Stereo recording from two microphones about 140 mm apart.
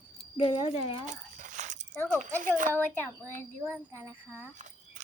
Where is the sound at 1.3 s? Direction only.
60° right (ahead or behind).